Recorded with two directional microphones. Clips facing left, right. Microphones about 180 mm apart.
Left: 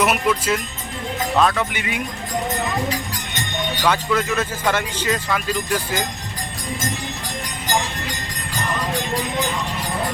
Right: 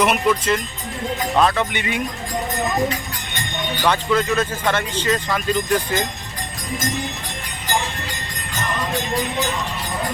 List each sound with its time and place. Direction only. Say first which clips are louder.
0.0 s speech: right 1 dB; 5° left (ahead or behind)
3.8 s speech: right 2 dB; 5° left (ahead or behind)